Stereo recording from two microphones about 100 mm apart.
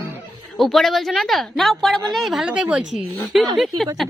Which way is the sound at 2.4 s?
10° right (ahead or behind).